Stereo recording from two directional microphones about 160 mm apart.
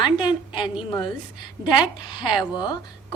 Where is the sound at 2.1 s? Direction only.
25° left (ahead or behind).